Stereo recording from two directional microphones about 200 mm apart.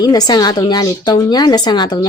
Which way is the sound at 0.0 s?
20° left (ahead or behind).